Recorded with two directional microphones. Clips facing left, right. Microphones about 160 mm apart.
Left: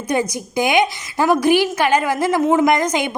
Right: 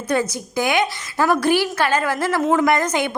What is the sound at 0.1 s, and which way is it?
A woman's voice, 15° left (ahead or behind).